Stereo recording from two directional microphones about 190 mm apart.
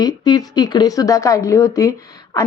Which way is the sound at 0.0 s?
20° left (ahead or behind).